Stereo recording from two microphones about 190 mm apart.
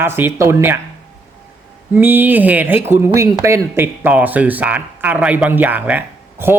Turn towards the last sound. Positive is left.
turn(degrees=-10)  # may be behind; listen again after turning